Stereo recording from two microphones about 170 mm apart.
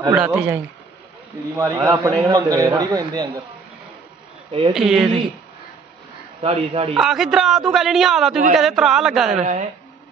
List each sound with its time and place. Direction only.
0.1 s speech: 5° right (ahead or behind)
1.6 s a man's voice: 20° right (ahead or behind)
4.5 s a man's voice: 35° right (ahead or behind)
4.7 s a man's voice: centre (ahead or behind)
6.4 s a man's voice: 35° right (ahead or behind)
7.0 s a man's voice: 5° right (ahead or behind)
9.4 s speech: 45° right (ahead or behind)